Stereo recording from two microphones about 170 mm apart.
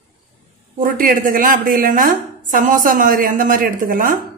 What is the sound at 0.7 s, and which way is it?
A woman's voice, 55° right (ahead or behind).